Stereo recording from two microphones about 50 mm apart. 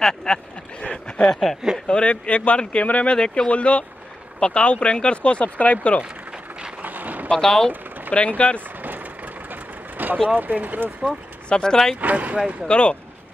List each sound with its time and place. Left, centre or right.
0.0 s speech: centre
1.3 s speech: centre
1.9 s speech: left
6.8 s a sound: right
7.3 s speech: centre
8.1 s speech: left
9.5 s vehicle: right
10.3 s speech: right
11.4 s speech: centre
12.0 s speech: right
12.6 s speech: left